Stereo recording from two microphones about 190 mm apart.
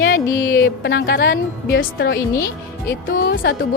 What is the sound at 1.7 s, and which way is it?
Speech, 75° left (ahead or behind).